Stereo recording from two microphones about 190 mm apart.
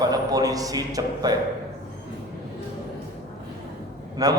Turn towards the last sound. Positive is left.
turn(degrees=-20)  # may be behind; listen again after turning